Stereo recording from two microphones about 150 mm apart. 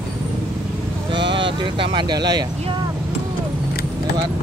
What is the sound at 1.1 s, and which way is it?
Sheep, 35° right (ahead or behind).